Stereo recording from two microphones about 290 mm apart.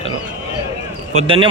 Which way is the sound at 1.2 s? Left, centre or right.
Centre.